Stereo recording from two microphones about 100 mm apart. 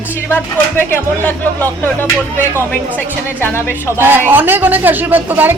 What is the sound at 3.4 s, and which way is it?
Speech, 25° left (ahead or behind).